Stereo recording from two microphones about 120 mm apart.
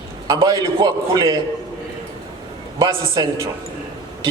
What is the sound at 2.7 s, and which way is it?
Speech, 35° right (ahead or behind).